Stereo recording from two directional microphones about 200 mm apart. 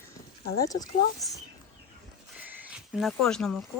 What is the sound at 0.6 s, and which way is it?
Speech, 20° left (ahead or behind).